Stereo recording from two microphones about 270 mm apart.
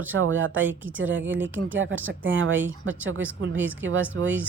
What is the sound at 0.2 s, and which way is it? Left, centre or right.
Speech, right.